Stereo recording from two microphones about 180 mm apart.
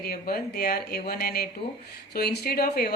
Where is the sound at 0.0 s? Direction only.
60° left (ahead or behind).